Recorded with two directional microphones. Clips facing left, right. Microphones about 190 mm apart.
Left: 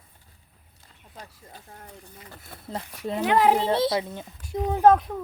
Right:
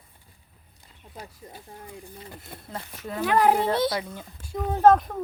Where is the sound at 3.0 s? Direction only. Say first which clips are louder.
Left 1 dB; 25° left (ahead or behind).